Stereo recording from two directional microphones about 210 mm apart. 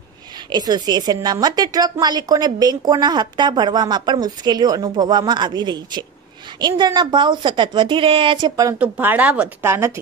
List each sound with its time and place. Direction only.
0.5 s a woman's voice: 20° right (ahead or behind)